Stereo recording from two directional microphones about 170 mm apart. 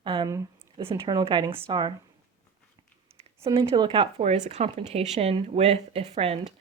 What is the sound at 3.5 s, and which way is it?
Speech, 35° right (ahead or behind).